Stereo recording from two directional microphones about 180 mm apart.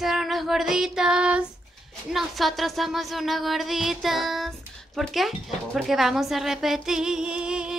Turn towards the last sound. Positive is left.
turn(degrees=-5)  # may be behind; listen again after turning